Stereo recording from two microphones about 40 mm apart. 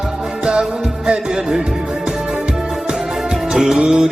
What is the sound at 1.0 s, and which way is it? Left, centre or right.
Music, right.